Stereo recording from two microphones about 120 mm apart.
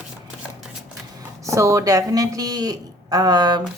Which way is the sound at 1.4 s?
25° right (ahead or behind).